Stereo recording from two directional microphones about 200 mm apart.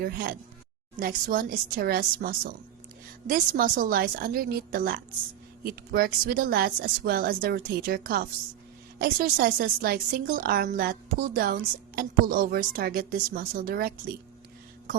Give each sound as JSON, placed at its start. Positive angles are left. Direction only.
{"t": 0.0, "sound": "a woman's voice", "side_deg": -50}